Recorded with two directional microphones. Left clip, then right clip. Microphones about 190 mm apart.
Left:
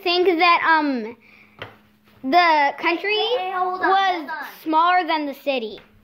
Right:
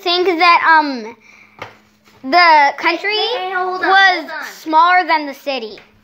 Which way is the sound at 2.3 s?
15° left (ahead or behind).